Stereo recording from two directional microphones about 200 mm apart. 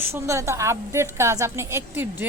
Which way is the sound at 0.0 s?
15° right (ahead or behind).